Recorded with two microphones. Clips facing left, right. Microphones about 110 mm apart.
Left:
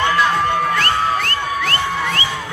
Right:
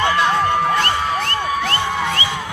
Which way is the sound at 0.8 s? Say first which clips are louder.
Left 1 dB; 20° right (ahead or behind).